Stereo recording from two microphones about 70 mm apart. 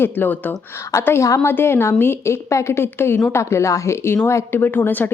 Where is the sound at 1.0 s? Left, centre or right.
Left.